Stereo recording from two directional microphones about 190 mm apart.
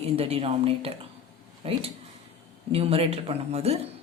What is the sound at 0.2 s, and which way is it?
Speech, 30° right (ahead or behind).